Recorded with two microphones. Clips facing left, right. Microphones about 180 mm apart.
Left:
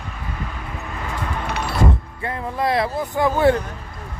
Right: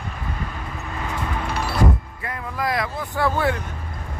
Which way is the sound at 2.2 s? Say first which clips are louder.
Left 4 dB; 30° left (ahead or behind).